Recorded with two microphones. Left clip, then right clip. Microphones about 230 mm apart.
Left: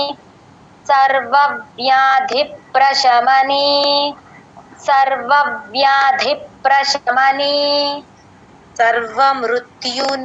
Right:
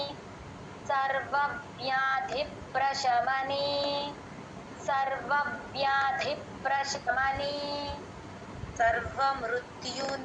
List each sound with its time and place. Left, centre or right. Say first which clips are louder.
0.9 s a woman's voice: left 17 dB; left